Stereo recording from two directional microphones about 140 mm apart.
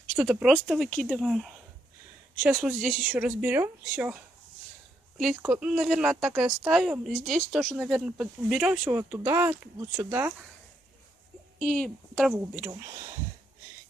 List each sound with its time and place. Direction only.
0.1 s speech: 5° right (ahead or behind)
0.8 s speech: 10° left (ahead or behind)
1.2 s speech: 5° right (ahead or behind)
2.6 s speech: 5° right (ahead or behind)
5.1 s speech: centre (ahead or behind)
8.8 s speech: 15° right (ahead or behind)
11.5 s speech: 5° left (ahead or behind)
12.3 s speech: 5° right (ahead or behind)
12.7 s speech: 25° right (ahead or behind)